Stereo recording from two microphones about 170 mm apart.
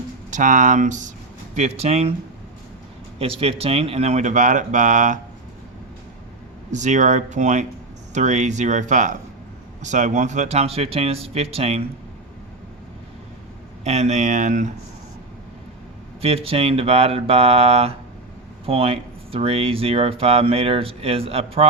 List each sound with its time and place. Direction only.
0.3 s speech: 45° right (ahead or behind)
3.2 s speech: 35° right (ahead or behind)
6.7 s speech: 45° right (ahead or behind)
13.8 s speech: 40° right (ahead or behind)
16.2 s speech: 35° right (ahead or behind)